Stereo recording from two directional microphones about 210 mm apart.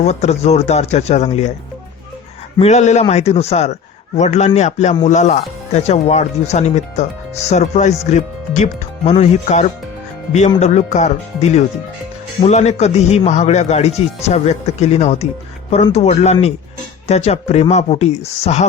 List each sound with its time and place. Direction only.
0.0 s speech: 30° left (ahead or behind)
2.6 s speech: 30° left (ahead or behind)